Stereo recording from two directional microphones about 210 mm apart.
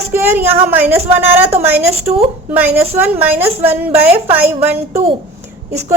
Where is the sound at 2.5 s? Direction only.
10° right (ahead or behind).